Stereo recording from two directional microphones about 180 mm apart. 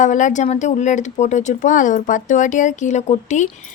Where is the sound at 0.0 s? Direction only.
45° left (ahead or behind).